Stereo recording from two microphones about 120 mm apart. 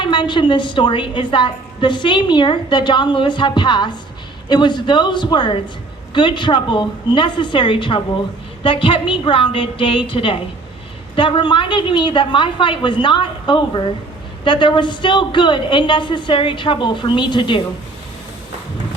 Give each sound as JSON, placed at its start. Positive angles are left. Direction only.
{"t": 0.0, "sound": "a woman's voice", "side_deg": 40}